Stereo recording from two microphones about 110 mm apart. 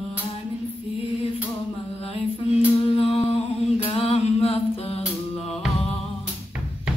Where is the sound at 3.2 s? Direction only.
65° left (ahead or behind).